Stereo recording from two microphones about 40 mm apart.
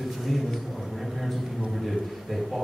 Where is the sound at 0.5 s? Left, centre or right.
Centre.